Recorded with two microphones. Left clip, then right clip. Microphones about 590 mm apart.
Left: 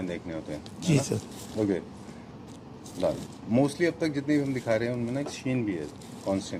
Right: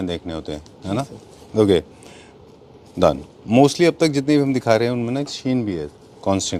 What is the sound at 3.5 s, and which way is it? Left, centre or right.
A man's voice, right.